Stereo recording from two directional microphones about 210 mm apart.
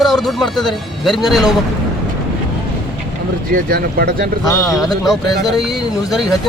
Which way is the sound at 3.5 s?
45° right (ahead or behind).